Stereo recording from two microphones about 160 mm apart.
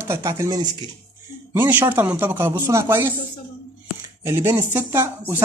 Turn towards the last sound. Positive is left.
turn(degrees=-15)  # may be behind; listen again after turning